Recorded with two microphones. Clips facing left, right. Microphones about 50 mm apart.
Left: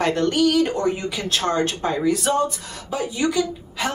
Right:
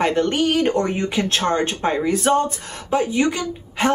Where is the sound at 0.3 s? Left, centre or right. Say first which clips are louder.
Even; right.